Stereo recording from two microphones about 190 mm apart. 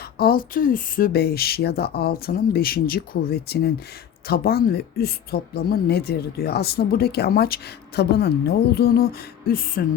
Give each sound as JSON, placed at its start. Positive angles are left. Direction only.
{"t": 0.2, "sound": "speech", "side_deg": 50}